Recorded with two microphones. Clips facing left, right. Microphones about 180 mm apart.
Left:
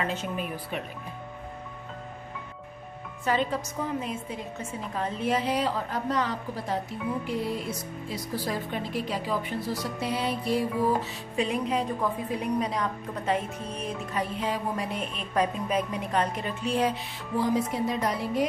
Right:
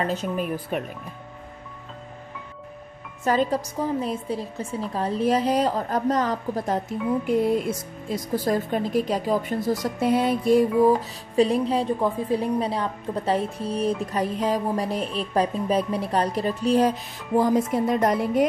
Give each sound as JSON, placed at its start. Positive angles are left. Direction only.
{"t": 0.0, "sound": "a woman's voice", "side_deg": -40}
{"t": 3.3, "sound": "a woman's voice", "side_deg": -40}
{"t": 11.3, "sound": "a woman's voice", "side_deg": -35}